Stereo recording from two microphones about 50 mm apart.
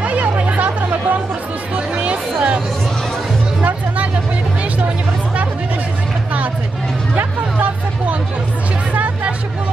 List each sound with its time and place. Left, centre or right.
0.0 s a sound: right
0.3 s chatter: right
2.0 s music: right
3.6 s music: right
8.9 s hubbub: right